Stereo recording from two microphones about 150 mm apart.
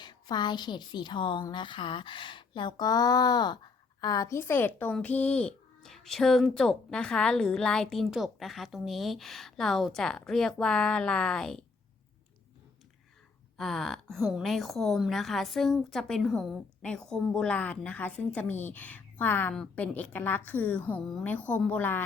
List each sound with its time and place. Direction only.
0.0 s a woman's voice: 30° left (ahead or behind); by 11.6 s 5° left (ahead or behind)
13.6 s a woman's voice: centre (ahead or behind)